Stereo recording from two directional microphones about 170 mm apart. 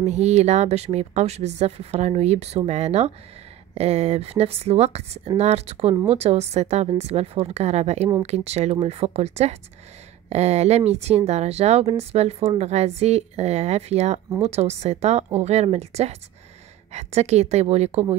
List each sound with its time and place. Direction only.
0.0 s speech: 40° right (ahead or behind)